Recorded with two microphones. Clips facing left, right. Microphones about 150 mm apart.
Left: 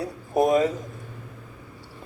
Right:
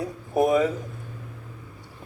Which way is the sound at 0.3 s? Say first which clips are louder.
Left 1 dB; 20° left (ahead or behind).